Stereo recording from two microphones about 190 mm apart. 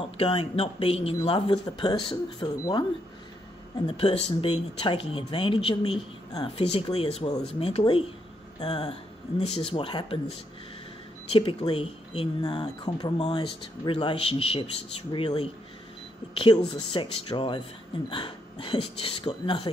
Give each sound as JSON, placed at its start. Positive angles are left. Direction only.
{"t": 0.0, "sound": "speech", "side_deg": 30}
{"t": 3.8, "sound": "speech", "side_deg": 30}
{"t": 11.3, "sound": "speech", "side_deg": 25}